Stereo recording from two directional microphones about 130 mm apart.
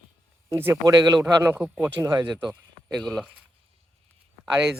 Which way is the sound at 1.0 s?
30° right (ahead or behind).